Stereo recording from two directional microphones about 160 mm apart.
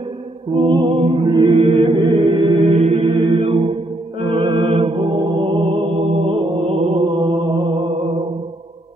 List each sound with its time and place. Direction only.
0.7 s chant: 30° right (ahead or behind)
7.9 s music: 50° right (ahead or behind)